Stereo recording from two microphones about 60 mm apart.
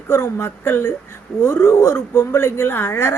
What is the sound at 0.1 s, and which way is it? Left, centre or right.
Speech, left.